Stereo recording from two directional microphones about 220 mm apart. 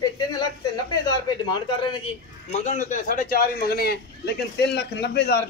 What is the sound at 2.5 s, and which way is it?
Speech, 30° left (ahead or behind).